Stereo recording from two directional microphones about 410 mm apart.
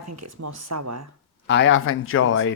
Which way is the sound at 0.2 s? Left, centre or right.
Right.